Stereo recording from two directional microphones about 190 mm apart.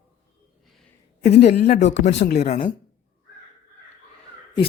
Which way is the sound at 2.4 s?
35° left (ahead or behind).